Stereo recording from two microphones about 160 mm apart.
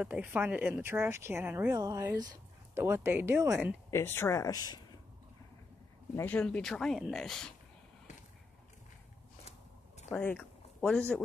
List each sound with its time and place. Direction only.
0.0 s speech: 10° right (ahead or behind)
3.9 s speech: 15° left (ahead or behind)
6.1 s speech: 10° left (ahead or behind)
10.1 s speech: 10° left (ahead or behind)